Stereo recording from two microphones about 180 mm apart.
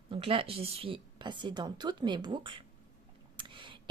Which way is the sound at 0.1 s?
30° right (ahead or behind).